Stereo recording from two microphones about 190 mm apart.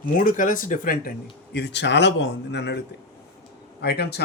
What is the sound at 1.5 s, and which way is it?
Speech, 65° left (ahead or behind).